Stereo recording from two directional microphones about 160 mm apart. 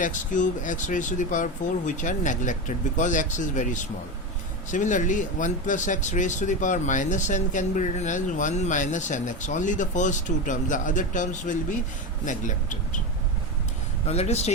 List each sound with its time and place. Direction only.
0.0 s speech: 50° left (ahead or behind)
14.1 s speech: 40° left (ahead or behind)